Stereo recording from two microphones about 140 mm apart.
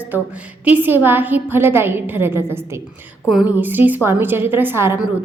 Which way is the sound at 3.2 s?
Centre (ahead or behind).